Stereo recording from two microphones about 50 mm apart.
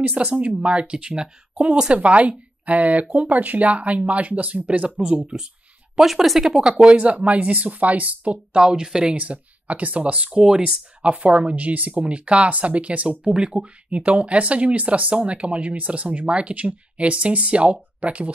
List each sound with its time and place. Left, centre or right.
0.1 s speech: right
5.9 s speech: centre
9.1 s speech: right